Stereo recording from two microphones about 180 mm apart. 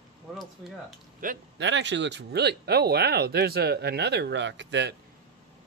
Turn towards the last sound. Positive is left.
turn(degrees=-80)